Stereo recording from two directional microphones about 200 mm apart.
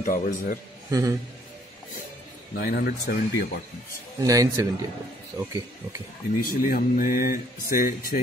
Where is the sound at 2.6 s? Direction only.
50° left (ahead or behind).